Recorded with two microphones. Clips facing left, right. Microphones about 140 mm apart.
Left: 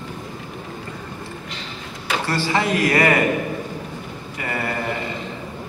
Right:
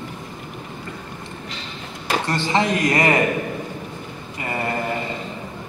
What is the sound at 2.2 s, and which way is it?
Speech, 20° right (ahead or behind).